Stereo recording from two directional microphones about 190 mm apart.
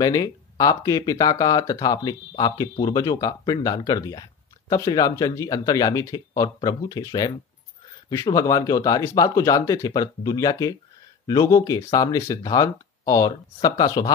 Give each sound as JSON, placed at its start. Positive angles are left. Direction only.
{"t": 0.0, "sound": "speech", "side_deg": 20}